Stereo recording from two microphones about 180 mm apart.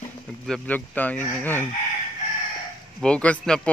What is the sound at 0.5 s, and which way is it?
Speech, 10° left (ahead or behind).